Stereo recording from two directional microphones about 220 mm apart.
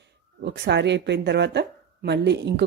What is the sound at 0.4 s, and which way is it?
Speech, 50° right (ahead or behind).